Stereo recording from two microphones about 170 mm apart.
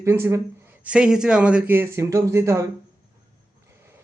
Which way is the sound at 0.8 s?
5° right (ahead or behind).